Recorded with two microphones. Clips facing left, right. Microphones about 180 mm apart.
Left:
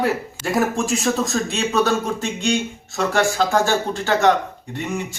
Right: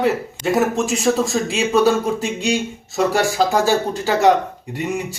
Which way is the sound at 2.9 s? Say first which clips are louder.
Right 2 dB; 10° right (ahead or behind).